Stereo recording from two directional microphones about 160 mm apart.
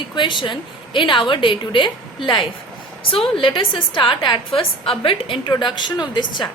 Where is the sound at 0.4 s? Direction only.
30° left (ahead or behind).